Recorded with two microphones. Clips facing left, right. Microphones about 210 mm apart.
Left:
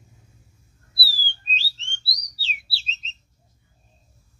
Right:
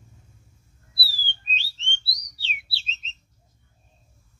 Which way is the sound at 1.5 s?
35° left (ahead or behind).